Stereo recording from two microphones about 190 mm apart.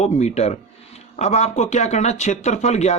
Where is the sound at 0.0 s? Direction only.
35° left (ahead or behind).